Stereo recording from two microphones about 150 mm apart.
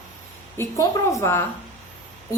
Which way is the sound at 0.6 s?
20° left (ahead or behind).